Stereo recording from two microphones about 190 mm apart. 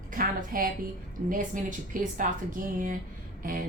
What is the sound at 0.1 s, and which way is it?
A woman's voice, 45° right (ahead or behind).